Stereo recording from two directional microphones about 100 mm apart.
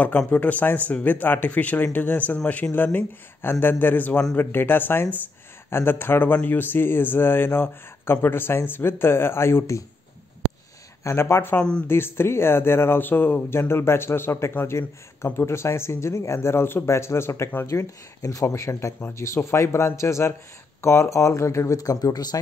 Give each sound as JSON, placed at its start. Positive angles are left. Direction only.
{"t": 0.3, "sound": "speech", "side_deg": 15}
{"t": 11.1, "sound": "speech", "side_deg": 25}